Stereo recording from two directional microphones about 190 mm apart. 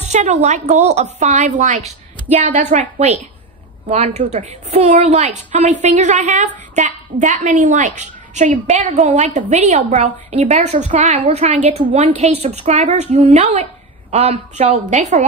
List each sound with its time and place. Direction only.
0.0 s a woman's voice: 40° right (ahead or behind)
3.9 s a woman's voice: 35° right (ahead or behind)